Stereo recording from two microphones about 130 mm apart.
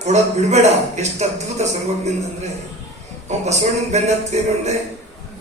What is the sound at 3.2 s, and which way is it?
A man's voice, 60° right (ahead or behind).